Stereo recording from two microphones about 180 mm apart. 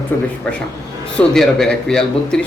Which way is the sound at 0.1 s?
10° left (ahead or behind).